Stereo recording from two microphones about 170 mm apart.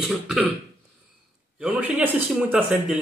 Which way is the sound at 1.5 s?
10° right (ahead or behind).